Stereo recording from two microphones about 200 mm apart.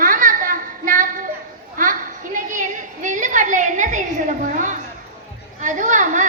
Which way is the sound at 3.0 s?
40° right (ahead or behind).